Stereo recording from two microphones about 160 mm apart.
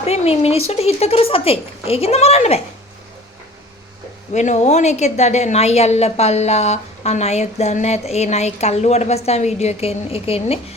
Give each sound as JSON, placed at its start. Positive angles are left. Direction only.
{"t": 0.0, "sound": "speech", "side_deg": 40}
{"t": 4.4, "sound": "a woman's voice", "side_deg": 45}